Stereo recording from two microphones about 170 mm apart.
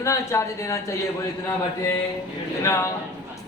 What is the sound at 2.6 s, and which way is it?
Speech, 15° left (ahead or behind).